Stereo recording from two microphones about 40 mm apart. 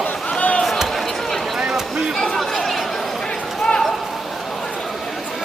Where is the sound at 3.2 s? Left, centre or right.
Centre.